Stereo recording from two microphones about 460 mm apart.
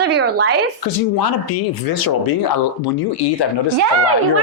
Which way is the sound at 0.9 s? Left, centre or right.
Left.